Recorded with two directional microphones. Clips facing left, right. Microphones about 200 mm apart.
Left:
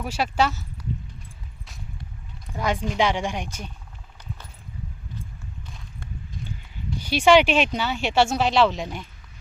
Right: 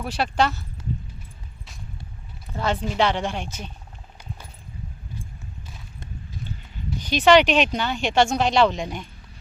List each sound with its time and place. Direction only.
0.0 s speech: 10° left (ahead or behind)
2.5 s speech: 15° left (ahead or behind)
7.0 s speech: 10° left (ahead or behind)